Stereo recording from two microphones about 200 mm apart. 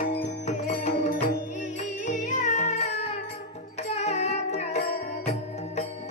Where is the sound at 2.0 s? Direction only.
40° left (ahead or behind).